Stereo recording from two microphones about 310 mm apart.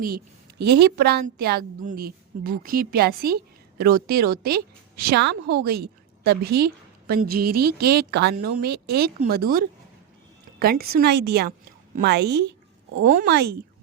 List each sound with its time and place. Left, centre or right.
0.6 s a woman's voice: right